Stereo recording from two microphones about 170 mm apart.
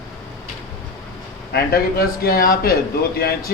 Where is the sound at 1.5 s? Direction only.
60° left (ahead or behind).